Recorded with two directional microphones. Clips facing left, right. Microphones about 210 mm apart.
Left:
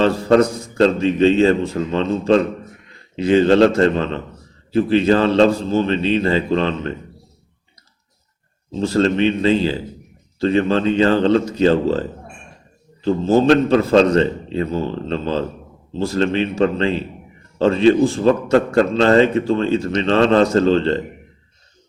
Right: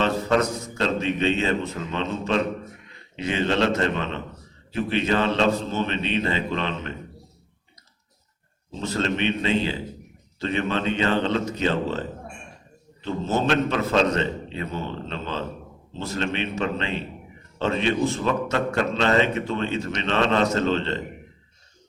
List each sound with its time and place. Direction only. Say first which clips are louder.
0.0 s a man's voice: left 8 dB; 30° left (ahead or behind)
8.8 s a man's voice: left 9 dB; 35° left (ahead or behind)